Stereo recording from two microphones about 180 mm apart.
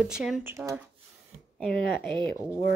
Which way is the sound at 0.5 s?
15° right (ahead or behind).